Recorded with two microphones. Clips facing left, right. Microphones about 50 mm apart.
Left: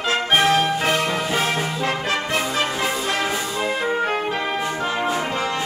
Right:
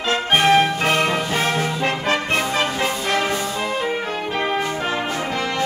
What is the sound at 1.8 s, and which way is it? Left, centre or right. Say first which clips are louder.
Brass instrument: right 2 dB; right.